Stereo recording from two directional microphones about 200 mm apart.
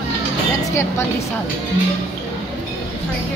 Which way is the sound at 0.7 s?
15° left (ahead or behind).